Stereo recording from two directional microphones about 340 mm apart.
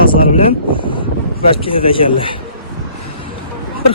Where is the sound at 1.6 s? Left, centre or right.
Centre.